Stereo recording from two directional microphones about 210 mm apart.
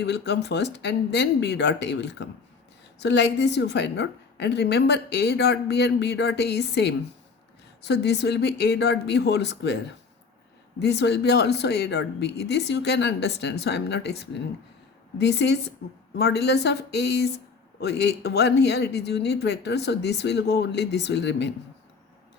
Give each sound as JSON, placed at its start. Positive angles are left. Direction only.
{"t": 0.0, "sound": "a woman's voice", "side_deg": 55}